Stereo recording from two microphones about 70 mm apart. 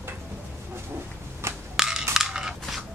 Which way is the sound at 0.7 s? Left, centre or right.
Right.